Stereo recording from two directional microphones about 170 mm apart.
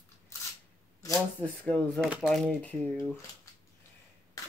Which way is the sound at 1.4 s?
5° left (ahead or behind).